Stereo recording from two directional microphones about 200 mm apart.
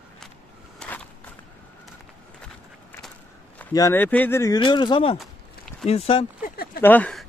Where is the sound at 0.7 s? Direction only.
5° left (ahead or behind).